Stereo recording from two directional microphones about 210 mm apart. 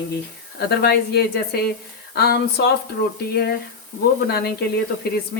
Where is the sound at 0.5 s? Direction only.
50° left (ahead or behind).